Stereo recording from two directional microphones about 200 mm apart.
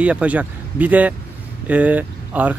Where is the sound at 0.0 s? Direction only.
5° right (ahead or behind).